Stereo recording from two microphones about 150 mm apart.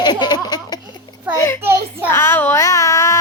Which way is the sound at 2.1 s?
15° left (ahead or behind).